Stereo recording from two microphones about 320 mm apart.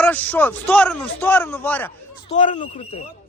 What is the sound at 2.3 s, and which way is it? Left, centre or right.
Speech, left.